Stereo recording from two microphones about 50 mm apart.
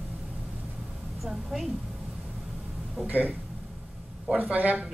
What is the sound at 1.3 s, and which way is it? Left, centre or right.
Speech, centre.